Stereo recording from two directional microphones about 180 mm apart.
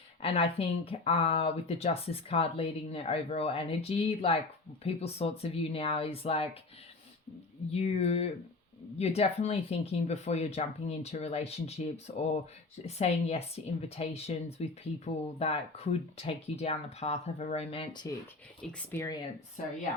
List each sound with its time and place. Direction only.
0.2 s speech: 30° left (ahead or behind)
7.7 s speech: 35° left (ahead or behind)
18.8 s speech: 10° left (ahead or behind)